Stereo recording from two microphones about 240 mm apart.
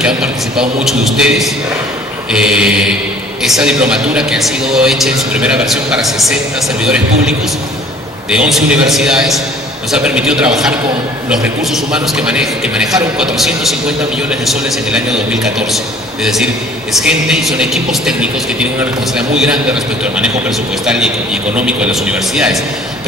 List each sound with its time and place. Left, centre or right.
0.0 s a man's voice: centre
17.0 s a man's voice: centre